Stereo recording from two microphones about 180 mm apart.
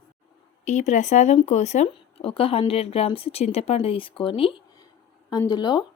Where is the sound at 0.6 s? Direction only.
40° left (ahead or behind).